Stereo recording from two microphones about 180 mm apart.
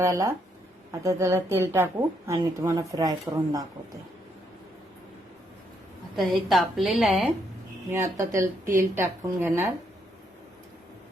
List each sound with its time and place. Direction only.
0.0 s a woman's voice: 20° right (ahead or behind)
6.1 s a woman's voice: centre (ahead or behind)
7.9 s a woman's voice: 15° right (ahead or behind)